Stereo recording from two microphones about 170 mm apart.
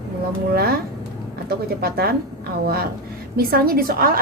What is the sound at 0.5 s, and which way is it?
A woman's voice, 65° right (ahead or behind).